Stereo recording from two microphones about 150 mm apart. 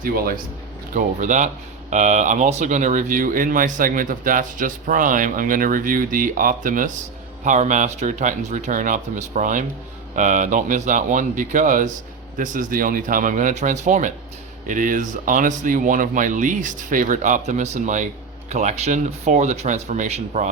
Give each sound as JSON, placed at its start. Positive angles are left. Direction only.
{"t": 0.0, "sound": "a man's voice", "side_deg": -80}
{"t": 0.9, "sound": "speech", "side_deg": -55}